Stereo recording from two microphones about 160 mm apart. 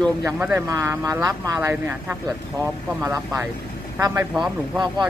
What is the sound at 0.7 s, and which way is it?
Speech, 20° right (ahead or behind).